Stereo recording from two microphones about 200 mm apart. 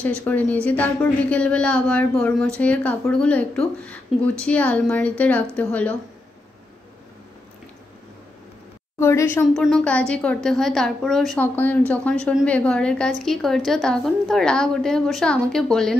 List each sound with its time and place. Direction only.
0.0 s a woman's voice: 10° left (ahead or behind)
9.0 s speech: 15° left (ahead or behind)
9.5 s a woman's voice: 5° left (ahead or behind)